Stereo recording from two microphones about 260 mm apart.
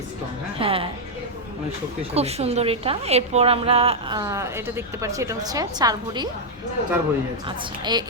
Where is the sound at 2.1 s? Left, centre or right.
Right.